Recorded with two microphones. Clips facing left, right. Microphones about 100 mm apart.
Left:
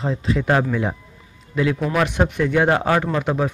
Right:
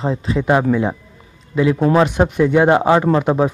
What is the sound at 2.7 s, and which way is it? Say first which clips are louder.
Speech: right 6 dB; 20° right (ahead or behind).